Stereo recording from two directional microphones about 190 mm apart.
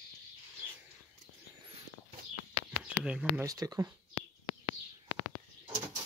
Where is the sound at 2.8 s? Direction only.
5° right (ahead or behind).